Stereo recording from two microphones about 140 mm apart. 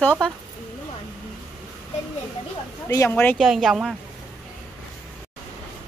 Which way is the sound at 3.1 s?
10° left (ahead or behind).